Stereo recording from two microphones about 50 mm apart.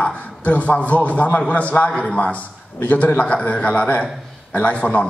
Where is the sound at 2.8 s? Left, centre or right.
Left.